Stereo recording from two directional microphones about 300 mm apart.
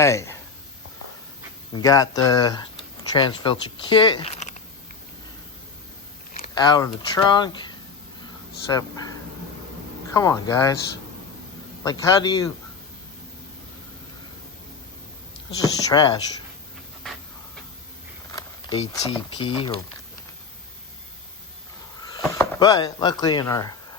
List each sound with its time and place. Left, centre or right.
0.0 s speech: centre
1.7 s speech: centre
6.5 s speech: centre
8.7 s speech: centre
10.2 s speech: centre
11.8 s speech: centre
15.5 s speech: centre
18.3 s speech: centre
22.3 s speech: centre